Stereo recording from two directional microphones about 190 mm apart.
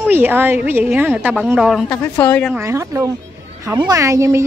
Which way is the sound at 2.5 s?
15° right (ahead or behind).